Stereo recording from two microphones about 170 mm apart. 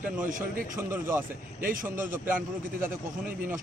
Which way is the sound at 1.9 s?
15° right (ahead or behind).